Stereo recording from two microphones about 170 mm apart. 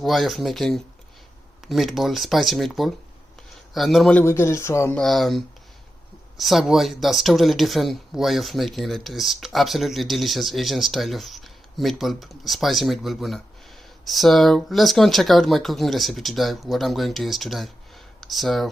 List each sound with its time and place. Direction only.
0.0 s speech: centre (ahead or behind)
4.2 s speech: 15° left (ahead or behind)
4.9 s speech: centre (ahead or behind)